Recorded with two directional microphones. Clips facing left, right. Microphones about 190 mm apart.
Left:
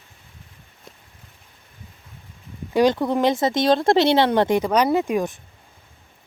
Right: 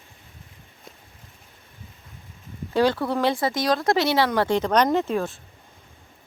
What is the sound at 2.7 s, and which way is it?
Speech, 15° left (ahead or behind).